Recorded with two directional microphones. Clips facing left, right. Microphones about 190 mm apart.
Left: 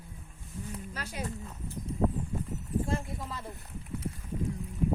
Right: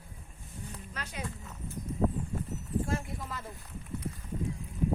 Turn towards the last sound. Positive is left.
turn(degrees=25)  # may be behind; listen again after turning